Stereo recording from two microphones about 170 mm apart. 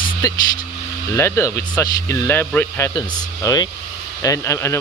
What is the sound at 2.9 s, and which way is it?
Speech, 20° left (ahead or behind).